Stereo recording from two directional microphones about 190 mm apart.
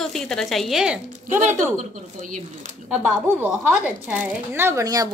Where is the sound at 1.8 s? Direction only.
40° right (ahead or behind).